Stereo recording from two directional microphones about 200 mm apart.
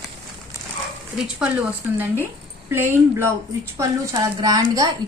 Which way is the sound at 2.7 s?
10° right (ahead or behind).